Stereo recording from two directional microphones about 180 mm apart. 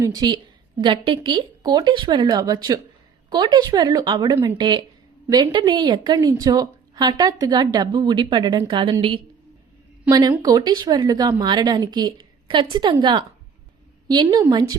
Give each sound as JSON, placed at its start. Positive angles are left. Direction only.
{"t": 0.0, "sound": "a woman's voice", "side_deg": -20}